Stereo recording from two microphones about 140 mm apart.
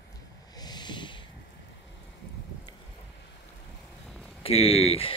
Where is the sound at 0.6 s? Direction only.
30° left (ahead or behind).